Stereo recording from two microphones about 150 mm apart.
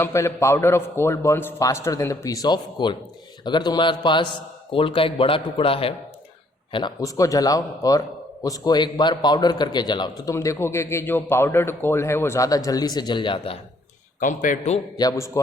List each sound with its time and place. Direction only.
0.0 s a man's voice: 20° left (ahead or behind); by 13.6 s 35° left (ahead or behind)
14.2 s speech: 60° left (ahead or behind)
14.9 s a man's voice: 25° left (ahead or behind)